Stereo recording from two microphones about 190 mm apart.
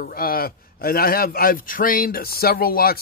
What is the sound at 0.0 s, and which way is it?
A man's voice, 50° left (ahead or behind).